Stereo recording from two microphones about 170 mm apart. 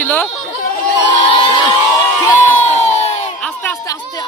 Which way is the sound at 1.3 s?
30° left (ahead or behind).